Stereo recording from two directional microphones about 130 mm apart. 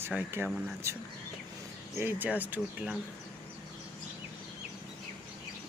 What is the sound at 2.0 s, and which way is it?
Speech, 15° right (ahead or behind).